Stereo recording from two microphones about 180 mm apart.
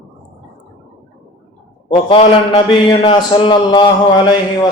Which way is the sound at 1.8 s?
30° left (ahead or behind).